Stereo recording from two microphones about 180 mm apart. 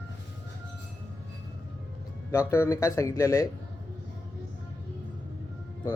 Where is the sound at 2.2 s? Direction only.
15° left (ahead or behind).